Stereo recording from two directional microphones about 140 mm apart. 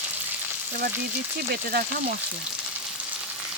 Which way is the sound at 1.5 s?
90° right.